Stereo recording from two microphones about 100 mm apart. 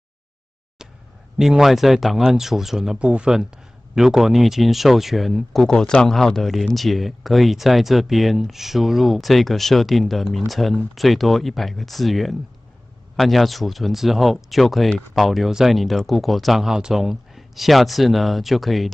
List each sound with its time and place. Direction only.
1.4 s speech: 5° right (ahead or behind)